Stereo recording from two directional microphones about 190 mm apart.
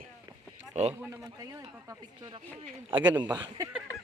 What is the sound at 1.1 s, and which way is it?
Speech, 15° right (ahead or behind).